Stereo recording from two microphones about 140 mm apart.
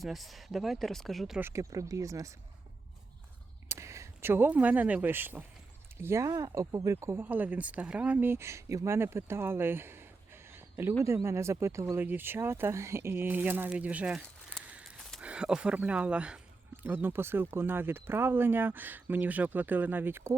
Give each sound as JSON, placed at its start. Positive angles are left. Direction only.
{"t": 0.0, "sound": "speech", "side_deg": 0}
{"t": 1.4, "sound": "speech", "side_deg": -20}
{"t": 3.7, "sound": "speech", "side_deg": -20}
{"t": 14.7, "sound": "a sound", "side_deg": -10}
{"t": 15.2, "sound": "speech", "side_deg": -10}